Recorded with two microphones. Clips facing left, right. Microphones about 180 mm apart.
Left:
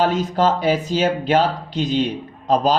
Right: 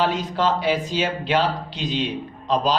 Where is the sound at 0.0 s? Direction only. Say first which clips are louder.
Left 4 dB; 45° left (ahead or behind).